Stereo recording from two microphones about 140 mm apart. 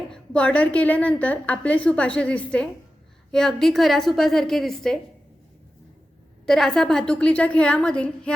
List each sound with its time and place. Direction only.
0.1 s a woman's voice: 10° left (ahead or behind)
6.4 s a woman's voice: 5° left (ahead or behind)